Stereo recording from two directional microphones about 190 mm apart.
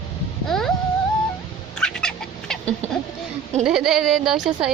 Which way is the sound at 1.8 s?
5° left (ahead or behind).